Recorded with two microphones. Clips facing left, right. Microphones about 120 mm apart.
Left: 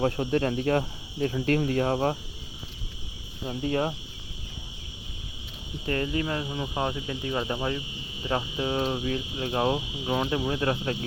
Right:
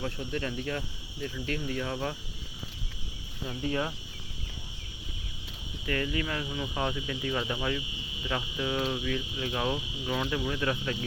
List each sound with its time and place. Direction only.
0.0 s speech: 50° left (ahead or behind)
3.4 s speech: 35° left (ahead or behind)
5.8 s speech: 30° left (ahead or behind)